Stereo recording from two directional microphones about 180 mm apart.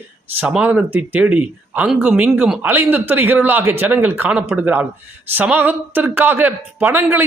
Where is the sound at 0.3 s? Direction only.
5° right (ahead or behind).